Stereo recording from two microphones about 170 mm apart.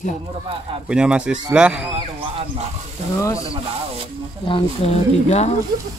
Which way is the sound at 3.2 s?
20° left (ahead or behind).